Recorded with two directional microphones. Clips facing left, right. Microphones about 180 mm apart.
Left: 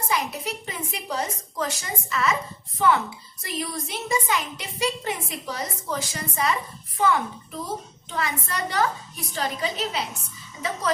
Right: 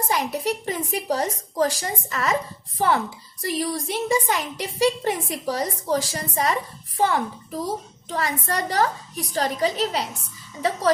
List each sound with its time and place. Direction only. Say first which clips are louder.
0.1 s a woman's voice: right 3 dB; 40° right (ahead or behind)